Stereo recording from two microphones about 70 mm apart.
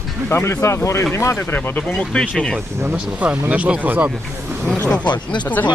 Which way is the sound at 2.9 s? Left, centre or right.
Right.